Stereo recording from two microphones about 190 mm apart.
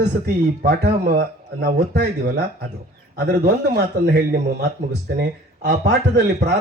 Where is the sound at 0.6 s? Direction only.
55° right (ahead or behind).